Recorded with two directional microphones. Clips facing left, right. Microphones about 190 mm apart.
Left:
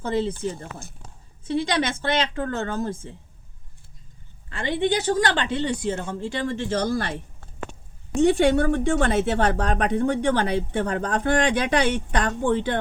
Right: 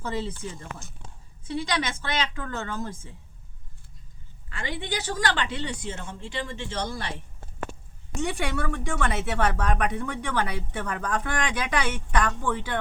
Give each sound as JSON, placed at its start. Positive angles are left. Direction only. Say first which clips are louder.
{"t": 0.0, "sound": "speech", "louder": "left 7 dB", "side_deg": 30}
{"t": 4.4, "sound": "speech", "louder": "left 10 dB", "side_deg": 30}
{"t": 8.2, "sound": "speech", "louder": "left 11 dB", "side_deg": 30}